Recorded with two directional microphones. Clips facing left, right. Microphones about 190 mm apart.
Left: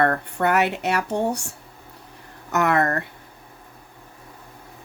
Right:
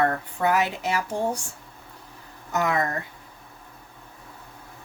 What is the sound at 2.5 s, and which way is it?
Speech, 70° left (ahead or behind).